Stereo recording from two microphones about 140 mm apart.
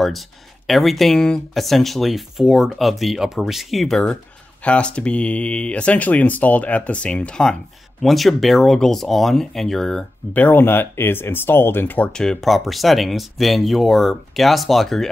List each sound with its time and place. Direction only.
0.0 s speech: centre (ahead or behind)